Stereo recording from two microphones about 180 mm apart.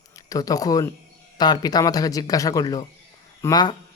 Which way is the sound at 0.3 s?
20° left (ahead or behind).